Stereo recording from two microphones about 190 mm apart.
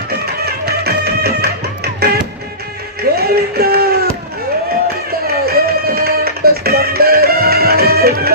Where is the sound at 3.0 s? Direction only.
55° right (ahead or behind).